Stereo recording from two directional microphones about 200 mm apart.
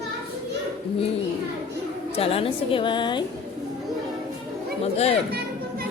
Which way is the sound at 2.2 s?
30° left (ahead or behind).